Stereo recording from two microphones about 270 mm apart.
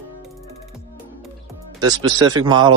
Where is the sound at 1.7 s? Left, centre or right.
Centre.